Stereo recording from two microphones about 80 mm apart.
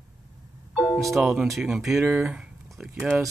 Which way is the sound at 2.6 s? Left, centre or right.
Centre.